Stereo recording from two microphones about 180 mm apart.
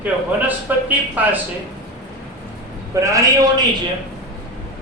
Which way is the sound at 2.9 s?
15° right (ahead or behind).